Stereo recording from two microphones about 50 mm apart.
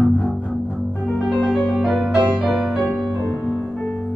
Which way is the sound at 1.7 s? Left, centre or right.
Centre.